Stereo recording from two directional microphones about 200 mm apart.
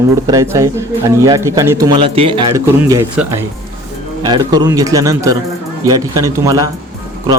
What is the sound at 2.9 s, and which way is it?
Speech, 15° right (ahead or behind).